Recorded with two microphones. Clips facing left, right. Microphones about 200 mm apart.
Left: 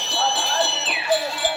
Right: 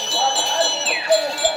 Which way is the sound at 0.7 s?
Centre (ahead or behind).